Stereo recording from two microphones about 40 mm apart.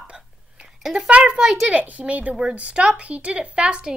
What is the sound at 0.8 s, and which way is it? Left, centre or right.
Speech, centre.